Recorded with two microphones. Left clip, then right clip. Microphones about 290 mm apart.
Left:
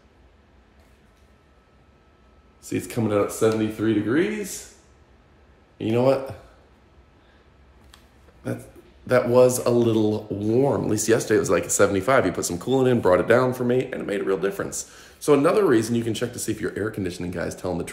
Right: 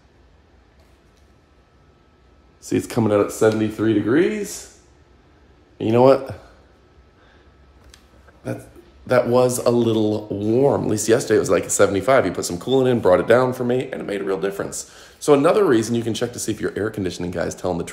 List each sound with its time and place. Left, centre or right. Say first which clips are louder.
2.6 s speech: right 6 dB; right
5.8 s speech: right 6 dB; right
8.4 s speech: right 2 dB; centre